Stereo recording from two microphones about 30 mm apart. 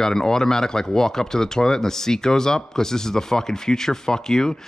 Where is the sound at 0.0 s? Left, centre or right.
Centre.